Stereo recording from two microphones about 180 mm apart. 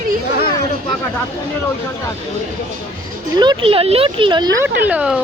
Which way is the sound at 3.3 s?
25° right (ahead or behind).